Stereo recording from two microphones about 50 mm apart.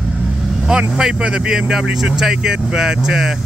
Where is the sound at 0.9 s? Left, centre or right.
Centre.